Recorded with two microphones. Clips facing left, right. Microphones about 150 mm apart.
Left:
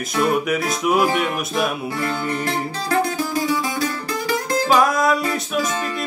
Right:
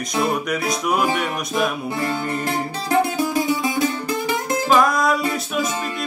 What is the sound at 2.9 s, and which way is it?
Music, 20° right (ahead or behind).